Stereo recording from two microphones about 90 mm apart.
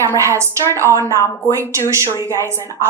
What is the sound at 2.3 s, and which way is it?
Speech, 35° right (ahead or behind).